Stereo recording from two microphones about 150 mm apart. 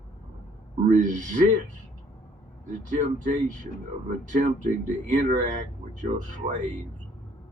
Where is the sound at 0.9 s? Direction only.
55° right (ahead or behind).